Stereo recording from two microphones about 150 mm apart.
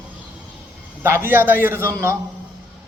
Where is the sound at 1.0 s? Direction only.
15° right (ahead or behind).